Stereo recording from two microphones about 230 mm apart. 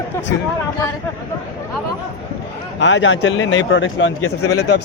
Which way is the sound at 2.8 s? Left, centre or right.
Left.